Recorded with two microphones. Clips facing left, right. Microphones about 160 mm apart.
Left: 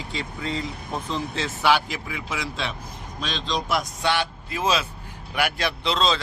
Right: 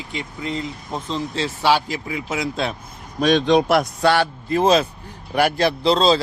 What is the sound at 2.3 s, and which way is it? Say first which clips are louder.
Speech: right 7 dB; 45° right (ahead or behind).